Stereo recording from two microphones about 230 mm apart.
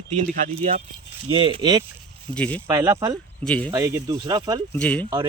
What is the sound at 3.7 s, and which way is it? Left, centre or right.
Speech, centre.